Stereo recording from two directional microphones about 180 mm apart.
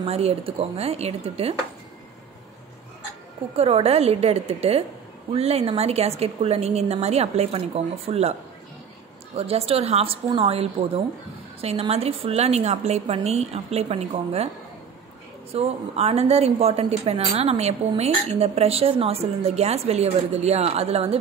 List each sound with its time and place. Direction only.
0.0 s speech: 35° right (ahead or behind)
3.5 s speech: 35° right (ahead or behind)
15.5 s speech: 35° right (ahead or behind)